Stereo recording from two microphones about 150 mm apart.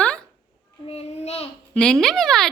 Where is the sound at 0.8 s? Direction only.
40° left (ahead or behind).